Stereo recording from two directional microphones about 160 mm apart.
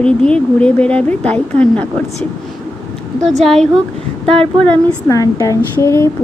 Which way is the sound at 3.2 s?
5° left (ahead or behind).